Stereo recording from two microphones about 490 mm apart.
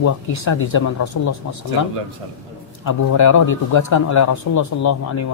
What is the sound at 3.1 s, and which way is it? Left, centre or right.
Speech, left.